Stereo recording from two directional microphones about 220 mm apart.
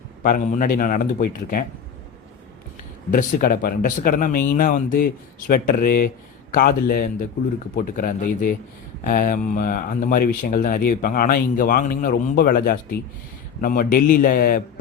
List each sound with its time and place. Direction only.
0.2 s speech: 40° left (ahead or behind)
3.1 s speech: 35° left (ahead or behind)